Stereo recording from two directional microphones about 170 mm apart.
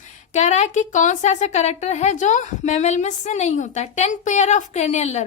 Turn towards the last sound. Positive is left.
turn(degrees=40)  # may be behind; listen again after turning